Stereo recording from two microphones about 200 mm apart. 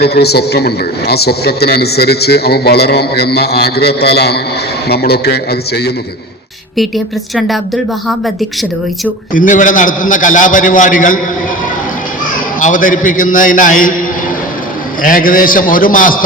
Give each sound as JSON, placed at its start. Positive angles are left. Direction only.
{"t": 0.0, "sound": "a man's voice", "side_deg": 55}
{"t": 6.7, "sound": "speech", "side_deg": 0}
{"t": 9.3, "sound": "a man's voice", "side_deg": 40}
{"t": 12.5, "sound": "a man's voice", "side_deg": 40}
{"t": 15.0, "sound": "a man's voice", "side_deg": 45}